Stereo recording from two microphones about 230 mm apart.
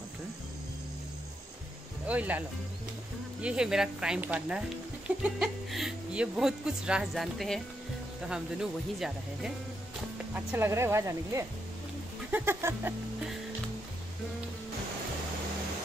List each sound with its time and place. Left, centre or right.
2.0 s speech: centre